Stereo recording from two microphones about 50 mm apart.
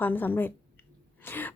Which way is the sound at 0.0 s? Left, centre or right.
Left.